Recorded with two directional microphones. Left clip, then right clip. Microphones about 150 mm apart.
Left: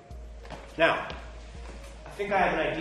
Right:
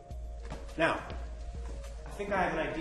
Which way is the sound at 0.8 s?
15° right (ahead or behind).